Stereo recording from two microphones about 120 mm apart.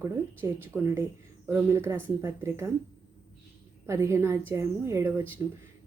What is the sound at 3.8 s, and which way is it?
A woman's voice, 25° right (ahead or behind).